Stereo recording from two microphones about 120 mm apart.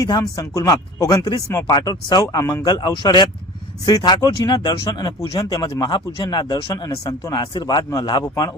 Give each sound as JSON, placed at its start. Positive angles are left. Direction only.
{"t": 0.0, "sound": "speech", "side_deg": 30}
{"t": 6.8, "sound": "speech", "side_deg": 30}